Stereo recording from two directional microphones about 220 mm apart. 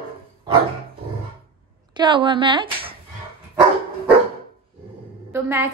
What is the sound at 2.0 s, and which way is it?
Speech, 20° right (ahead or behind).